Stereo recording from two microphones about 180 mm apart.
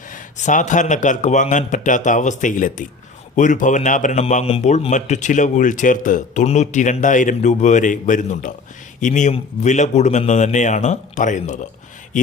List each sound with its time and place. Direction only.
0.1 s a man's voice: 45° left (ahead or behind)